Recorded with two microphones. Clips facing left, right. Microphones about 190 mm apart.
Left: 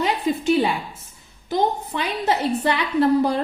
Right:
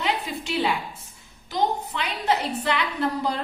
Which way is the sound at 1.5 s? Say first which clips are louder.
Left 3 dB; 50° left (ahead or behind).